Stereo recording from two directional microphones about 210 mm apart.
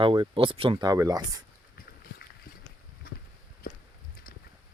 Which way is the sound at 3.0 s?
45° left (ahead or behind).